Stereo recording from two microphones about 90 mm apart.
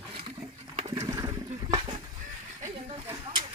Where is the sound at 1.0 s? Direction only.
35° right (ahead or behind).